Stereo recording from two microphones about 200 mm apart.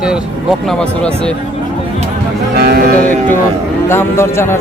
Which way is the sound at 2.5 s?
50° right (ahead or behind).